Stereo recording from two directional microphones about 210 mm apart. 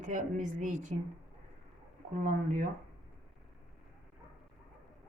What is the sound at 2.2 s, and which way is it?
Speech, 35° right (ahead or behind).